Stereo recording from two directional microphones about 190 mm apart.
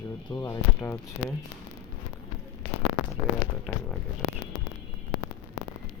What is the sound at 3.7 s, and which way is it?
Speech, 5° left (ahead or behind).